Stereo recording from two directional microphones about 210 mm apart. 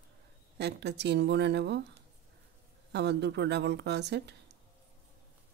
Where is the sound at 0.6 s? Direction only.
55° right (ahead or behind).